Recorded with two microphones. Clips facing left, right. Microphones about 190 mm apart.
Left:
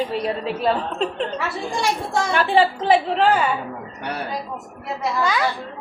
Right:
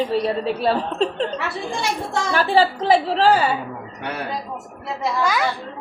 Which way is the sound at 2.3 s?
35° right (ahead or behind).